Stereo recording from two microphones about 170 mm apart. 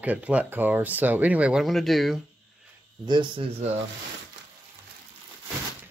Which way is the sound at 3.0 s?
25° right (ahead or behind).